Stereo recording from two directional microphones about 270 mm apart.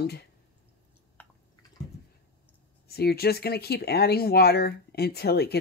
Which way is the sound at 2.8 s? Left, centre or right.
Left.